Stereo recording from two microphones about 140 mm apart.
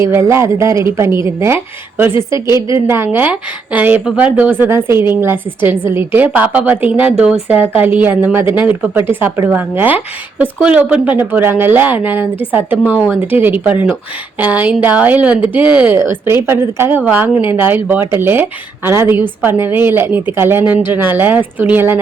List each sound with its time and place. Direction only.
0.0 s a woman's voice: 20° right (ahead or behind)